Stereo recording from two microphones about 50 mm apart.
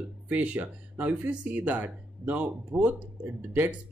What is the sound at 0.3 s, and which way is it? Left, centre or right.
Speech, right.